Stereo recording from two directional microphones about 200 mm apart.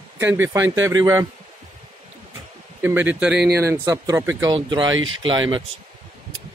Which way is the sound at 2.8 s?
10° right (ahead or behind).